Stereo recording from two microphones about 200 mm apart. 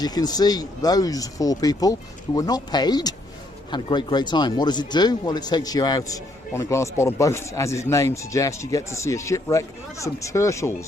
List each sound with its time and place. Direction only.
0.0 s speech: 20° left (ahead or behind)